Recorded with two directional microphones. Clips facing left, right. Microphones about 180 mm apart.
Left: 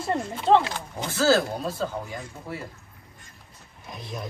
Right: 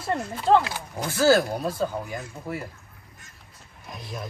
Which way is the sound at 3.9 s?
Centre (ahead or behind).